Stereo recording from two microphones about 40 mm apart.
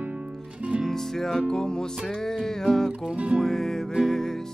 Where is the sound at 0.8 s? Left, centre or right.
Centre.